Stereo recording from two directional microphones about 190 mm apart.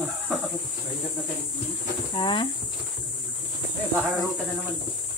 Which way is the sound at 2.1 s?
25° left (ahead or behind).